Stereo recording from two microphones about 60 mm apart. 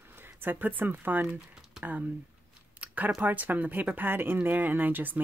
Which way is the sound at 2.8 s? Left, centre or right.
Right.